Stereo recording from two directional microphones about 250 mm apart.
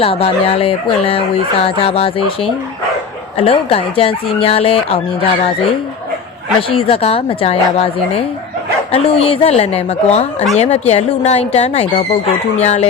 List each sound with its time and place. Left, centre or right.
0.0 s speech: left